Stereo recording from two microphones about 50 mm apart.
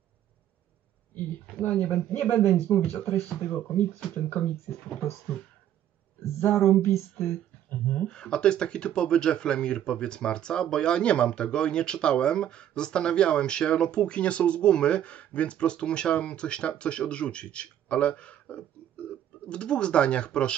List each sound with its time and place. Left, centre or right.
1.6 s speech: left
2.1 s speech: left
2.4 s speech: left
3.4 s speech: left
6.4 s speech: left
7.8 s speech: left